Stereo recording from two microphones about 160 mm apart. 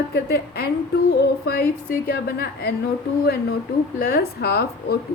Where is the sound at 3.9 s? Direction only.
75° left (ahead or behind).